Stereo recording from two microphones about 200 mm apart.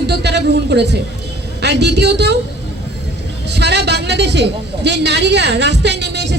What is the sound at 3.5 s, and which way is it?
A woman's voice, 55° right (ahead or behind).